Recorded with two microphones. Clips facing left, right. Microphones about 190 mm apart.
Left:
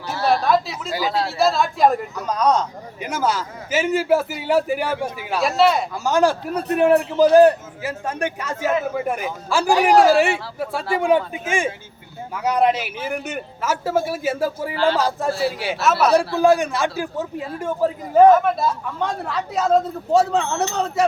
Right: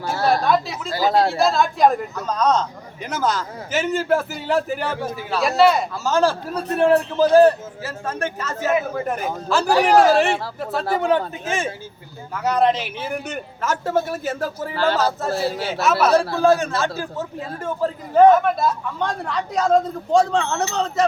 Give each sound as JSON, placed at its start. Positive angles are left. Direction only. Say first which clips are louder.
{"t": 0.0, "sound": "a sound", "louder": "even", "side_deg": -50}
{"t": 1.0, "sound": "speech", "louder": "right 6 dB", "side_deg": -45}
{"t": 1.4, "sound": "a woman's voice", "louder": "even", "side_deg": 0}
{"t": 5.4, "sound": "a woman's voice", "louder": "right 1 dB", "side_deg": 0}
{"t": 5.9, "sound": "speech", "louder": "left 1 dB", "side_deg": 15}
{"t": 15.8, "sound": "a woman's voice", "louder": "even", "side_deg": 0}
{"t": 16.1, "sound": "speech", "louder": "left 1 dB", "side_deg": 15}